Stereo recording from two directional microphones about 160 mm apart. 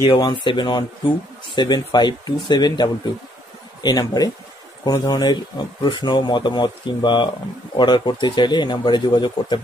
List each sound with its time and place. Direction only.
0.2 s speech: 30° left (ahead or behind)